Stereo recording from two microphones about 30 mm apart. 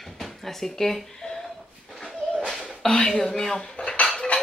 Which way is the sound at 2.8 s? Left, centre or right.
Centre.